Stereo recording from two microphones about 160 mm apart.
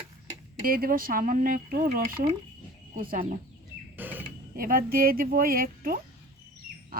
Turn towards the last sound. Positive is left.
turn(degrees=-65)  # may be behind; listen again after turning